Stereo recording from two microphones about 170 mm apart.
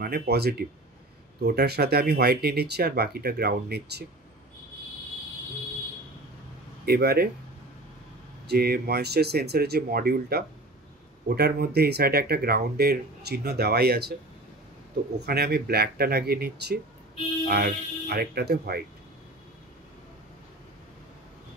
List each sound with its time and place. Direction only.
0.0 s speech: 65° right (ahead or behind)
6.9 s speech: 65° right (ahead or behind)
8.5 s speech: 70° right (ahead or behind)
15.1 s speech: 70° right (ahead or behind)